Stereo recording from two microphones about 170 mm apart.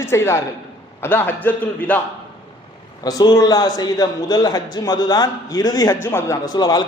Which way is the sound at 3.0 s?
25° left (ahead or behind).